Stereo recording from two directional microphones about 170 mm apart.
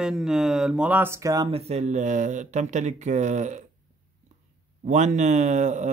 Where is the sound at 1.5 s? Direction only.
35° right (ahead or behind).